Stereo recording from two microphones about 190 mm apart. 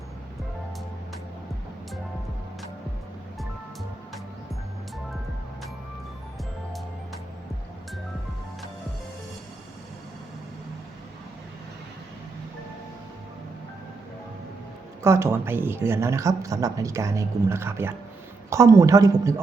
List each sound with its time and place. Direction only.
15.0 s a woman's voice: 15° right (ahead or behind)